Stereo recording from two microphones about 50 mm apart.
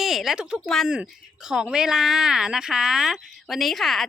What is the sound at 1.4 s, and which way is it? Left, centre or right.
A woman's voice, centre.